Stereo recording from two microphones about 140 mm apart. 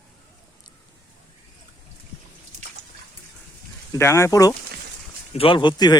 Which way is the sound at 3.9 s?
20° left (ahead or behind).